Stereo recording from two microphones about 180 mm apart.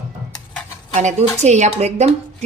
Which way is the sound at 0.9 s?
40° right (ahead or behind).